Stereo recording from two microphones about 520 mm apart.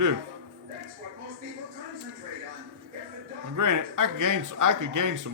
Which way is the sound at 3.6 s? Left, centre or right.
Right.